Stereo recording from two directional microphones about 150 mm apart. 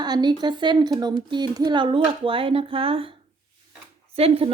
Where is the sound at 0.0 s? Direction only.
30° right (ahead or behind).